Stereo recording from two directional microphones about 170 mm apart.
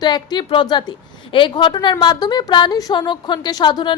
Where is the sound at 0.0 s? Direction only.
25° left (ahead or behind).